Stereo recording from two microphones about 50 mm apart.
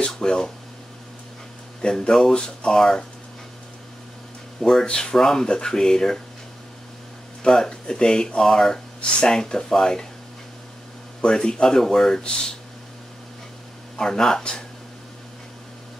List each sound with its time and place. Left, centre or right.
0.1 s speech: centre
1.8 s speech: centre
2.7 s speech: centre
4.6 s speech: centre
7.4 s speech: centre
11.1 s speech: centre
13.9 s speech: centre